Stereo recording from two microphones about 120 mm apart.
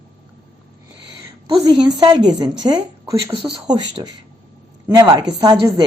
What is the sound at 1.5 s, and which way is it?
Speech, 35° right (ahead or behind).